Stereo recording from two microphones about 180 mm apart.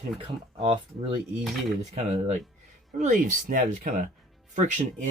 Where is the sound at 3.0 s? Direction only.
45° right (ahead or behind).